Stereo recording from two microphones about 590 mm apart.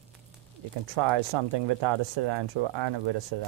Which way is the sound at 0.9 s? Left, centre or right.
Right.